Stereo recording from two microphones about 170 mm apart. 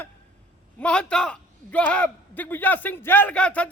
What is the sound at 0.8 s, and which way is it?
Speech, 5° left (ahead or behind).